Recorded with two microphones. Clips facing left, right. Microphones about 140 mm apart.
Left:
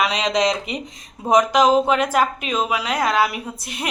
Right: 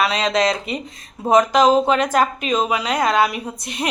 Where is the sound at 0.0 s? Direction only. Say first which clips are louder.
Right 1 dB; 15° left (ahead or behind).